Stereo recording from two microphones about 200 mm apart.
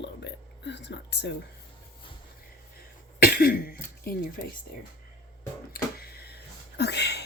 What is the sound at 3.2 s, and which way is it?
Cough, 45° left (ahead or behind).